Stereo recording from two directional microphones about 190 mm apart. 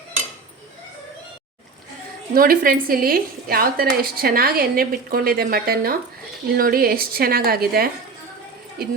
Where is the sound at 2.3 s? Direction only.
50° right (ahead or behind).